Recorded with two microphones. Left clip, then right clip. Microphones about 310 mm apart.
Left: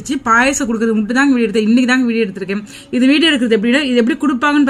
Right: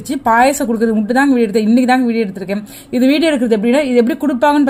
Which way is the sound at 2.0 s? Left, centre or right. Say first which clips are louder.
Even; right.